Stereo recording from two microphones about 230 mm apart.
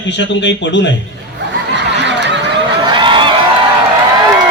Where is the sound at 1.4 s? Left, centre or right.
Right.